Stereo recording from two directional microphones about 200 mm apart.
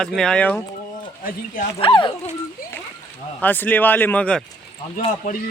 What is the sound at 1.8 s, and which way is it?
Speech, 25° left (ahead or behind).